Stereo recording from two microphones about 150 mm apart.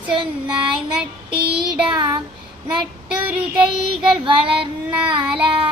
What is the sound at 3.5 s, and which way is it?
Child singing, 5° right (ahead or behind).